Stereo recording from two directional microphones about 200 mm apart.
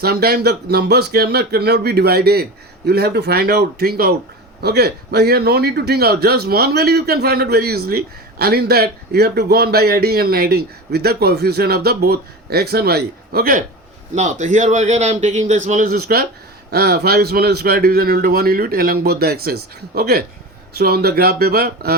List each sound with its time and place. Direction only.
0.0 s a man's voice: 50° right (ahead or behind)